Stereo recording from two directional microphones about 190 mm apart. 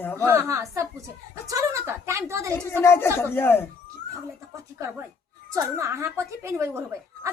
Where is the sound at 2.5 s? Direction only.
10° left (ahead or behind).